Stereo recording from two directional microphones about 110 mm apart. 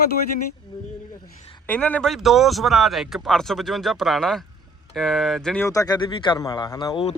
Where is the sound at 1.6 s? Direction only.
15° left (ahead or behind).